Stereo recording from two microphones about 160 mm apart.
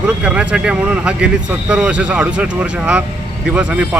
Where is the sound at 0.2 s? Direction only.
5° right (ahead or behind).